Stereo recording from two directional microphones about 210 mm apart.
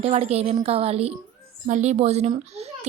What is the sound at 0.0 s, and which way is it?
A woman's voice, 30° right (ahead or behind).